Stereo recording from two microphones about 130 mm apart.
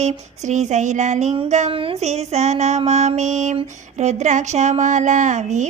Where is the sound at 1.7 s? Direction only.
45° right (ahead or behind).